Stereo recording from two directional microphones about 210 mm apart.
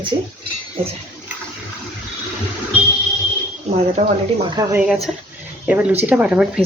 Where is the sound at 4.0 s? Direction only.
40° right (ahead or behind).